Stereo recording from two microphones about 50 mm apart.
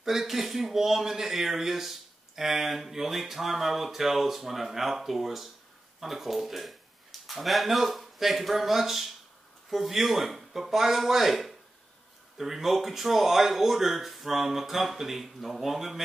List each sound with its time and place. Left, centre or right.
0.0 s speech: centre